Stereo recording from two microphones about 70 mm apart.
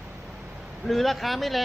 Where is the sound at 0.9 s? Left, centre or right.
Centre.